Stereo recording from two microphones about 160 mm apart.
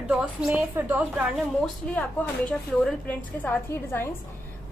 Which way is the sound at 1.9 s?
10° left (ahead or behind).